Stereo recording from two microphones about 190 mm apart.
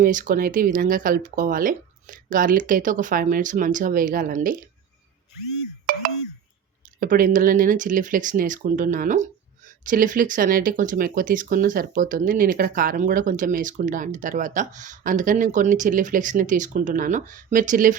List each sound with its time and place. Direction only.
0.0 s speech: 45° right (ahead or behind)
5.8 s a sound: 45° right (ahead or behind)
7.0 s speech: 45° right (ahead or behind)